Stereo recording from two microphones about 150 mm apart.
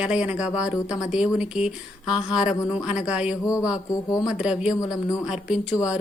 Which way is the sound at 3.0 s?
5° right (ahead or behind).